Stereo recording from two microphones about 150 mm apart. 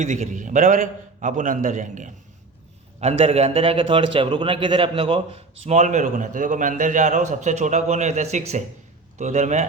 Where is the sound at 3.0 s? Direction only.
45° right (ahead or behind).